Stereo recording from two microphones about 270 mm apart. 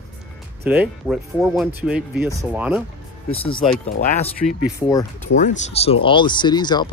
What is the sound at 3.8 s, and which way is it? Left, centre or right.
Speech, left.